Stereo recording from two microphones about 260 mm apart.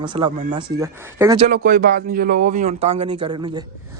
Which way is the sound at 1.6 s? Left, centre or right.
Right.